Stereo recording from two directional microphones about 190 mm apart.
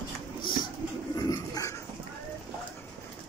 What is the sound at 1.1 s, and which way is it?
Bird, 20° left (ahead or behind).